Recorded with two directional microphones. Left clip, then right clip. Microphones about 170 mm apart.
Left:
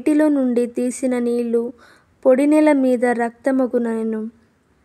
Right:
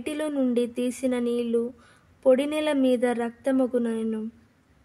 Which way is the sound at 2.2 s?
30° left (ahead or behind).